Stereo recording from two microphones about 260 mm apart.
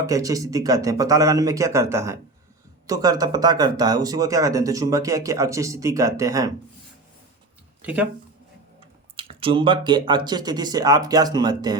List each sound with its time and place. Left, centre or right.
0.0 s speech: centre
7.8 s speech: centre
9.1 s speech: centre